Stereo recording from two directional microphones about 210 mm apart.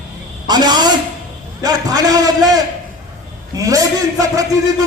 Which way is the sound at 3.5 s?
15° right (ahead or behind).